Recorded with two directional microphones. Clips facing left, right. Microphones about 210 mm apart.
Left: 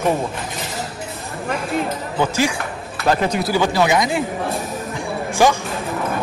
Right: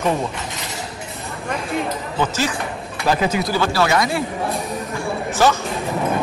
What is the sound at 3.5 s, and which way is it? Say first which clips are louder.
Speech: left 3 dB; 15° left (ahead or behind).